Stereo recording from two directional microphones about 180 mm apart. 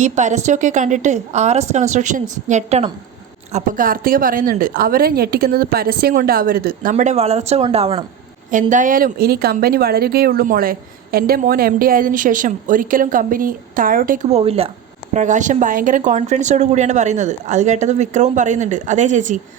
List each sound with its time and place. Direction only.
0.0 s speech: 40° right (ahead or behind)
3.5 s speech: 50° right (ahead or behind)
6.9 s speech: 40° right (ahead or behind)
8.7 s speech: 50° right (ahead or behind)